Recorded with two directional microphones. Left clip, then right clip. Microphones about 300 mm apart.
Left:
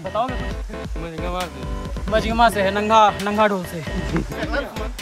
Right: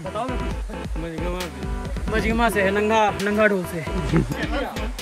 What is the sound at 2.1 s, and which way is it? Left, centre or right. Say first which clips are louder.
Speech: left 4 dB; centre.